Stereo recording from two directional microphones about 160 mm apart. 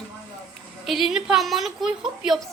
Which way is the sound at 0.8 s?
Centre (ahead or behind).